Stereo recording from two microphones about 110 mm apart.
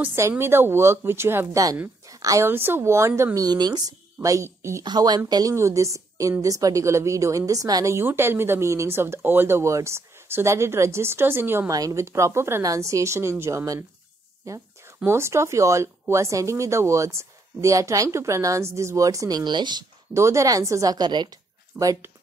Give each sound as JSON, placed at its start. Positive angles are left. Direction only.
{"t": 0.0, "sound": "a woman's voice", "side_deg": -20}
{"t": 3.3, "sound": "speech", "side_deg": -35}
{"t": 4.8, "sound": "a woman's voice", "side_deg": -35}
{"t": 20.2, "sound": "speech", "side_deg": -25}